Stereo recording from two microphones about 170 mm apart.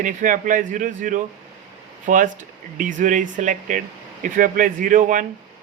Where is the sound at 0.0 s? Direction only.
50° right (ahead or behind).